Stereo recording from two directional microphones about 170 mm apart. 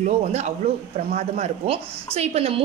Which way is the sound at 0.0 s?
40° right (ahead or behind).